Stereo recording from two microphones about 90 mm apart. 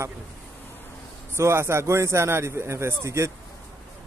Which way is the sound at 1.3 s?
30° right (ahead or behind).